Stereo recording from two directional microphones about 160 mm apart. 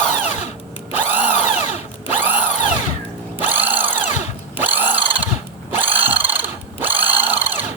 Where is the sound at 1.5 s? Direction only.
40° left (ahead or behind).